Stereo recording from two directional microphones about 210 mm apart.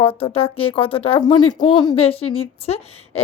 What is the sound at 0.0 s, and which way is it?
Speech, 25° left (ahead or behind).